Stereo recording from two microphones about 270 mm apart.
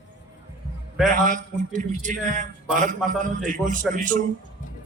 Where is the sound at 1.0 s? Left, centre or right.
Right.